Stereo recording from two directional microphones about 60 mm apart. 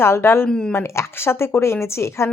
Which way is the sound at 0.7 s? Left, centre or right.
Left.